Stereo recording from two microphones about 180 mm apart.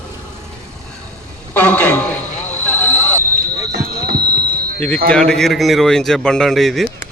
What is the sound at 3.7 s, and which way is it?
Basketball bounce, 55° right (ahead or behind).